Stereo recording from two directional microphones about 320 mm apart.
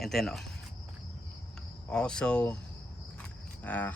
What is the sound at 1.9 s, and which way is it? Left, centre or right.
Speech, centre.